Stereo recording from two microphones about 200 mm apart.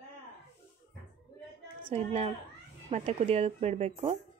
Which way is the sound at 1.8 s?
30° right (ahead or behind).